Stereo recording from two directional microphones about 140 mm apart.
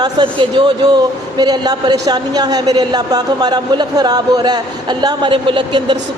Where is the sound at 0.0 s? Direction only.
35° right (ahead or behind).